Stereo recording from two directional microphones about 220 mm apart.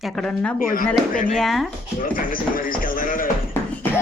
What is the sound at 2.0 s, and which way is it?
A man's voice, 40° left (ahead or behind).